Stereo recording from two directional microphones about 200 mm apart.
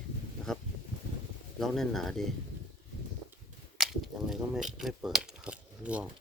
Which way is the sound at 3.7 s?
Centre (ahead or behind).